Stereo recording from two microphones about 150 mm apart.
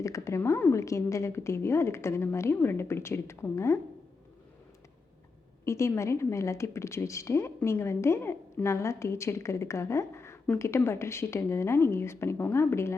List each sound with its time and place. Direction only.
0.0 s a woman's voice: 20° left (ahead or behind)
5.6 s a woman's voice: 20° left (ahead or behind)